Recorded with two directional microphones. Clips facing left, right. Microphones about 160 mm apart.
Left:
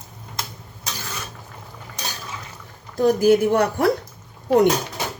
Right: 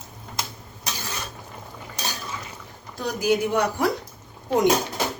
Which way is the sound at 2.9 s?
50° left (ahead or behind).